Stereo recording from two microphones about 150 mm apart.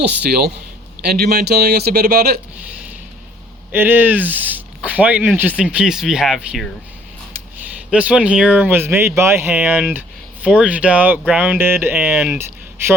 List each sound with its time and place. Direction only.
0.2 s speech: 90° right
3.7 s speech: 15° right (ahead or behind)
7.9 s speech: 10° right (ahead or behind)
12.1 s speech: centre (ahead or behind)